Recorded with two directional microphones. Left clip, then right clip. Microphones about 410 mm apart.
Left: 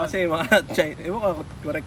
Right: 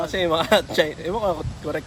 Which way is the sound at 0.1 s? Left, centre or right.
Centre.